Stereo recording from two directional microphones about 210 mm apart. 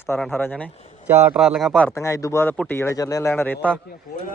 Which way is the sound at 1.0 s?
5° right (ahead or behind).